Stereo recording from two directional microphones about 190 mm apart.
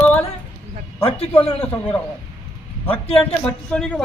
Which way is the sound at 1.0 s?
30° left (ahead or behind).